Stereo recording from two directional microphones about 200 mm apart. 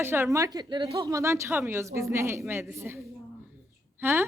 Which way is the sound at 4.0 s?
10° right (ahead or behind).